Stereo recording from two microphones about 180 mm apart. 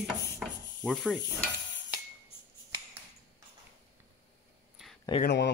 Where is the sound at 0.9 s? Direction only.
5° left (ahead or behind).